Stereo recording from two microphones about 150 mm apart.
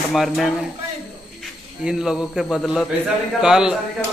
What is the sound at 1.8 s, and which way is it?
A man's voice, 5° right (ahead or behind).